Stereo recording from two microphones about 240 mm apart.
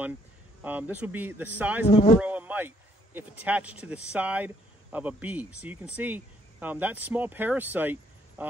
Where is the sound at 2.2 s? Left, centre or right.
Centre.